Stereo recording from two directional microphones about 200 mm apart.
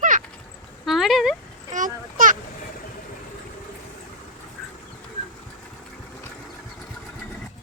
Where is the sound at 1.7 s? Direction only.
40° right (ahead or behind).